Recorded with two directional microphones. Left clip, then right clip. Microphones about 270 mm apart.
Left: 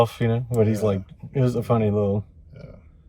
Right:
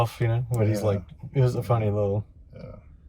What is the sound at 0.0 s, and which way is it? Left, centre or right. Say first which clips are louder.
Speech: left 6 dB; centre.